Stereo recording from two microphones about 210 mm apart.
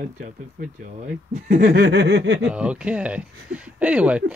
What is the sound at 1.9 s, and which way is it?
Speech, 55° right (ahead or behind).